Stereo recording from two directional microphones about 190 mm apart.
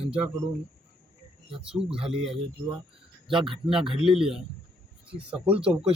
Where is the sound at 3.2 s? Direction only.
25° right (ahead or behind).